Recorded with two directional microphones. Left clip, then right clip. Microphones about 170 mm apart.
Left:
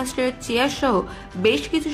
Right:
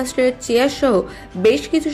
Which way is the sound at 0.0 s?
10° right (ahead or behind).